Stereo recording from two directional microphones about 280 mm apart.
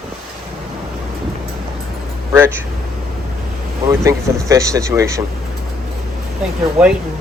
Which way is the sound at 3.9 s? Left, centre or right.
Centre.